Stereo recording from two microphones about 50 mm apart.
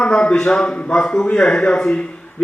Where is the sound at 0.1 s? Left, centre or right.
Centre.